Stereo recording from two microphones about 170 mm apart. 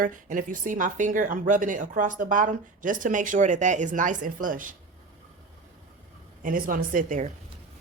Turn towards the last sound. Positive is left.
turn(degrees=-50)  # may be behind; listen again after turning